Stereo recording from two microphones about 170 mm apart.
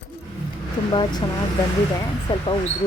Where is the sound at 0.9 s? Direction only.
25° left (ahead or behind).